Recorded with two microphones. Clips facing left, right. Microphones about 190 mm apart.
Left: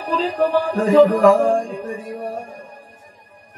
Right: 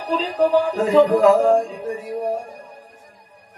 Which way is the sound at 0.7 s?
55° left (ahead or behind).